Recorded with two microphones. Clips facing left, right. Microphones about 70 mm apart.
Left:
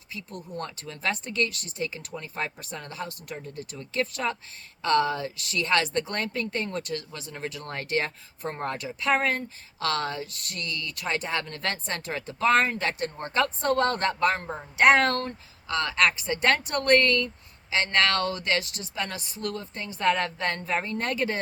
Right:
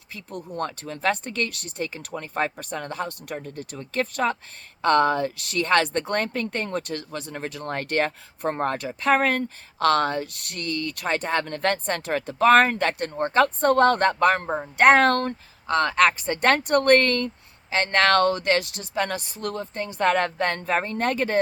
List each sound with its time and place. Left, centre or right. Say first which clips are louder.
0.2 s speech: right 6 dB; right
3.5 s speech: even; right
12.9 s speech: right 6 dB; right
14.4 s speech: right 8 dB; right
14.8 s speech: right 3 dB; right